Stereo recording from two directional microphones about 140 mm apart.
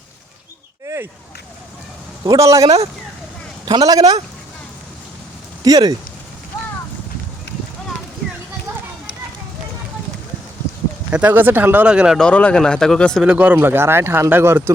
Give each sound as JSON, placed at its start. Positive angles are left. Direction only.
{"t": 2.2, "sound": "a man's voice", "side_deg": -25}
{"t": 2.6, "sound": "speech", "side_deg": -45}
{"t": 3.7, "sound": "a man's voice", "side_deg": -30}
{"t": 5.6, "sound": "a man's voice", "side_deg": -30}
{"t": 11.1, "sound": "speech", "side_deg": -10}
{"t": 12.2, "sound": "speech", "side_deg": 10}
{"t": 13.2, "sound": "speech", "side_deg": -10}